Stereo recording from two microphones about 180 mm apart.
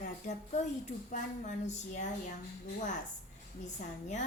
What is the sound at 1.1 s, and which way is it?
Speech, 40° left (ahead or behind).